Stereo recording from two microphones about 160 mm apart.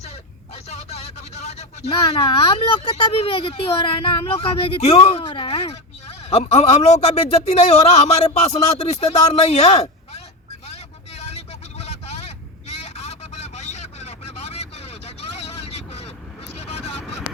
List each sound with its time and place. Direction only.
0.5 s speech: 40° left (ahead or behind)
10.7 s vehicle: 40° left (ahead or behind)